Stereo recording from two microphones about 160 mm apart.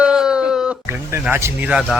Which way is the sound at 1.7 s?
5° right (ahead or behind).